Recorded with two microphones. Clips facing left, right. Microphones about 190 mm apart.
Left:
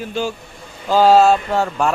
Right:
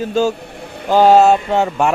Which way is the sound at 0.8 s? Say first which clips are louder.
Right 2 dB; 20° right (ahead or behind).